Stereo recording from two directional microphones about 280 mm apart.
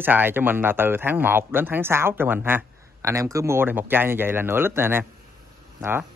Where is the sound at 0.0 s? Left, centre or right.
Centre.